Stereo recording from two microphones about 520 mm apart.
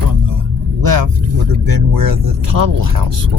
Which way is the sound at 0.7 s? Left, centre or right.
Right.